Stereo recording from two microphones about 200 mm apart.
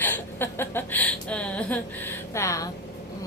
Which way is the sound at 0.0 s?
10° left (ahead or behind).